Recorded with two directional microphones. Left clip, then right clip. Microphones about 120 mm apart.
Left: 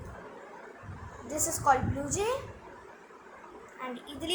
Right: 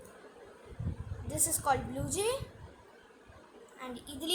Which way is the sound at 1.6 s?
80° right.